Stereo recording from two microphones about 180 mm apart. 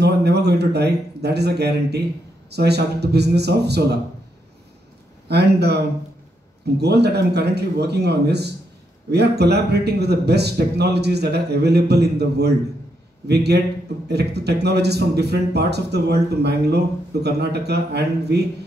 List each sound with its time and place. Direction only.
0.0 s speech: 65° right (ahead or behind)
5.3 s a man's voice: 65° right (ahead or behind)